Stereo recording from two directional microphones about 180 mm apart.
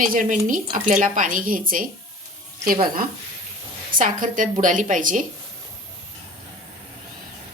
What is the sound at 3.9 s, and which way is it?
A woman's voice, 45° right (ahead or behind).